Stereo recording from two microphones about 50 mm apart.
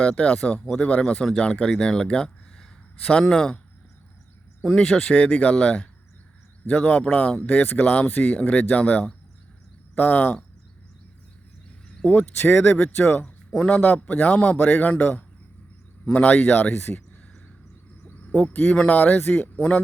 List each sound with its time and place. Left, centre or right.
0.0 s a man's voice: left
4.6 s a man's voice: centre; by 8.6 s left
9.9 s speech: left
12.0 s a man's voice: left
18.3 s a man's voice: left
19.1 s speech: left
19.5 s speech: left